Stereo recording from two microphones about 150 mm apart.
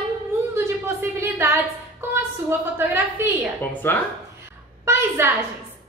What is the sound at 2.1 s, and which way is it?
A woman's voice, 15° right (ahead or behind).